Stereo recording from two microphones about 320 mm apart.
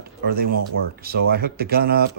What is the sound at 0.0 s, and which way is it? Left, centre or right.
Speech, right.